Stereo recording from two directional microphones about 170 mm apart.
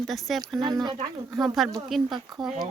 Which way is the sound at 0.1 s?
Centre (ahead or behind).